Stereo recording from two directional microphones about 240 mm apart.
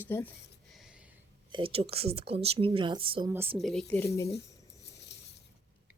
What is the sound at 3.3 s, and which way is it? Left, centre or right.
Speech, centre.